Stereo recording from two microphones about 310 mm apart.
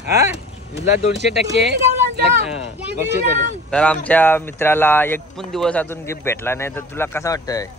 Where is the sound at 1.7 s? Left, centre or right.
Right.